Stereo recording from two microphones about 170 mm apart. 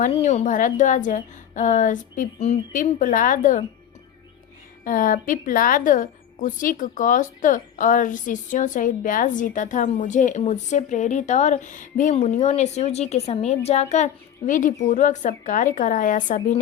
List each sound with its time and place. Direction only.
0.0 s a woman's voice: 45° left (ahead or behind)
4.8 s a woman's voice: 55° left (ahead or behind)